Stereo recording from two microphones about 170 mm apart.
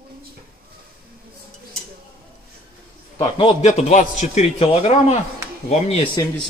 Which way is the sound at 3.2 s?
30° left (ahead or behind).